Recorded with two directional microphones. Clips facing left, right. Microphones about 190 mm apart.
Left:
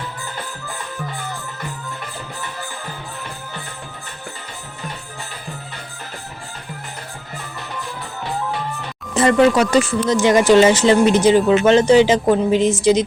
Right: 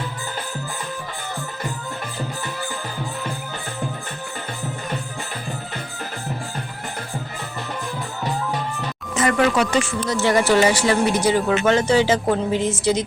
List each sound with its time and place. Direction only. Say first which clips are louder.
9.1 s speech: left 5 dB; 35° left (ahead or behind)
10.1 s speech: left 5 dB; 20° left (ahead or behind)